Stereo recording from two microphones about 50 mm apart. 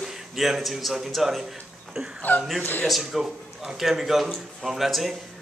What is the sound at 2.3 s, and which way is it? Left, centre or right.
Speech, left.